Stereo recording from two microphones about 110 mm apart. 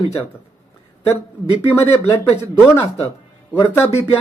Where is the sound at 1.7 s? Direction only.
20° left (ahead or behind).